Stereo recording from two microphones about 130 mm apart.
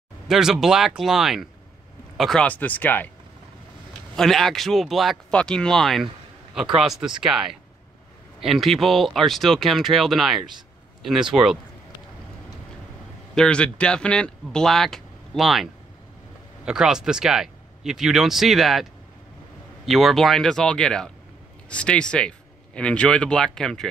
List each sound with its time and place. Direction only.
0.3 s speech: 5° right (ahead or behind); by 3.1 s 15° left (ahead or behind)
4.1 s speech: centre (ahead or behind)
13.3 s speech: 5° left (ahead or behind)